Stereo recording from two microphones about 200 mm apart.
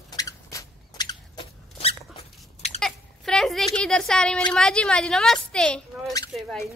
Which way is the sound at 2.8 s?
Centre (ahead or behind).